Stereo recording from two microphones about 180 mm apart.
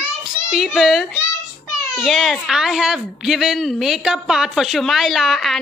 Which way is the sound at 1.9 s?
5° right (ahead or behind).